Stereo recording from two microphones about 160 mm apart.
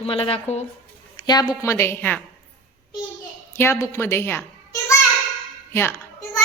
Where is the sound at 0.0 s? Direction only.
35° left (ahead or behind).